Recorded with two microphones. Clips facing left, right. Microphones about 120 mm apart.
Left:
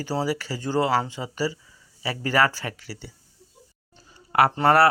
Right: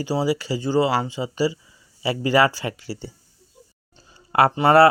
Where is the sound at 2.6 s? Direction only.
25° right (ahead or behind).